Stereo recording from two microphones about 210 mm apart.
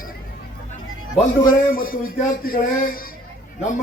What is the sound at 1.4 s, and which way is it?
Speech, 45° left (ahead or behind).